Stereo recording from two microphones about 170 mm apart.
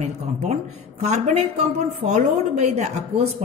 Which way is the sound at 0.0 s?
40° right (ahead or behind).